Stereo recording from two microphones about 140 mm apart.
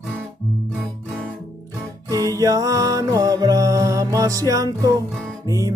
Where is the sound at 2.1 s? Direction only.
25° right (ahead or behind).